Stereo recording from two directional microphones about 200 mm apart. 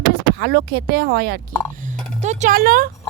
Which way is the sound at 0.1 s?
55° right (ahead or behind).